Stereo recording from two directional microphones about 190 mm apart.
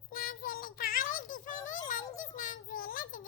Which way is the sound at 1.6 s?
40° left (ahead or behind).